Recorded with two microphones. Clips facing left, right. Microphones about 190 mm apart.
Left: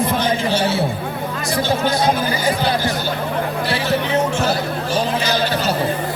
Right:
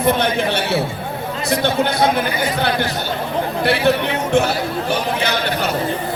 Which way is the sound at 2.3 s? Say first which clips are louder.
Even; 60° right (ahead or behind).